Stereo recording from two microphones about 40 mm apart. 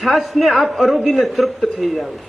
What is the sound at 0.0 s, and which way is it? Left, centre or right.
A man's voice, centre.